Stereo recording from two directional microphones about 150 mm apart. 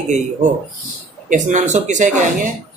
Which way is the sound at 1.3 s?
55° right (ahead or behind).